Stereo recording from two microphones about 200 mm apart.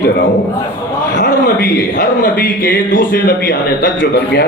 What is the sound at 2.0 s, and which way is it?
A man's voice, 40° left (ahead or behind).